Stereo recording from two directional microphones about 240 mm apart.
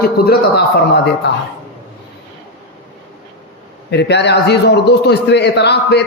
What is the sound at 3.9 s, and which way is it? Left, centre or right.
A man's voice, left.